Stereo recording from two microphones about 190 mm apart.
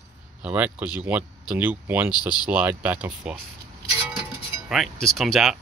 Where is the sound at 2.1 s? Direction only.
20° left (ahead or behind).